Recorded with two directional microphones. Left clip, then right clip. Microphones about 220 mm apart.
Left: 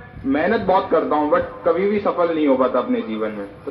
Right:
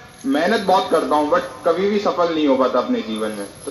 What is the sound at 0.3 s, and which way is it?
Speech, 45° right (ahead or behind).